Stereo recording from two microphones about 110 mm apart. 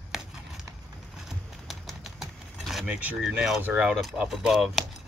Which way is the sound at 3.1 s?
5° right (ahead or behind).